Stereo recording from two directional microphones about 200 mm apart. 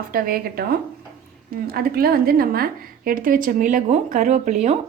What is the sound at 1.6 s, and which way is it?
A woman's voice, 50° right (ahead or behind).